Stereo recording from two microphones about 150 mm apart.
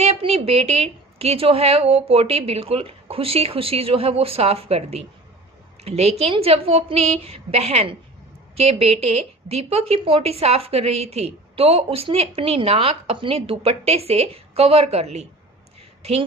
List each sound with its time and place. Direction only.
0.0 s a woman's voice: 40° right (ahead or behind)